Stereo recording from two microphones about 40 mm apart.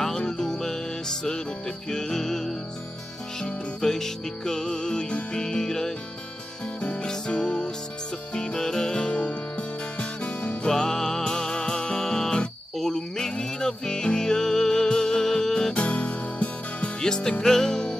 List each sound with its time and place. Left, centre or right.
0.0 s music: centre
6.8 s music: left
10.7 s music: centre
15.7 s music: left
17.0 s music: centre